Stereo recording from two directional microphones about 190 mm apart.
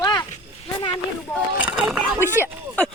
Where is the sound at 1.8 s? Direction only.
10° right (ahead or behind).